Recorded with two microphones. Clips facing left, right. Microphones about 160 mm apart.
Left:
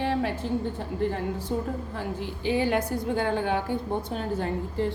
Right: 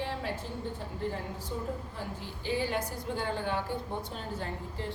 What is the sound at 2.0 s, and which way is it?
A woman's voice, 65° left (ahead or behind).